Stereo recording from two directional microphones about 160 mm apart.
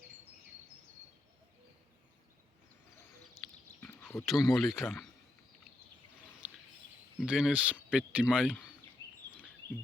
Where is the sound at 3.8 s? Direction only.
15° left (ahead or behind).